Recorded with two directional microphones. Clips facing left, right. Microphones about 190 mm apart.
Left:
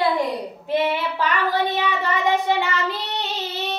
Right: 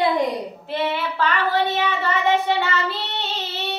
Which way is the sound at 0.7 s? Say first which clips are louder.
Left 3 dB; 15° left (ahead or behind).